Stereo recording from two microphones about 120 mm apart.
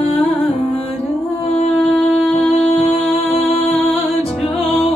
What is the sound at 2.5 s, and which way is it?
Music, 70° left (ahead or behind).